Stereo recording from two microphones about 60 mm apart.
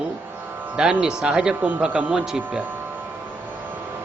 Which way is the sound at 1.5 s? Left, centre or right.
Right.